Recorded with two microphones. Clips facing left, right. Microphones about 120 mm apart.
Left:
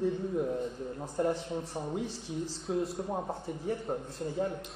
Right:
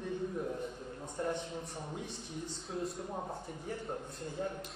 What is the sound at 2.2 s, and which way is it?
Speech, 90° left.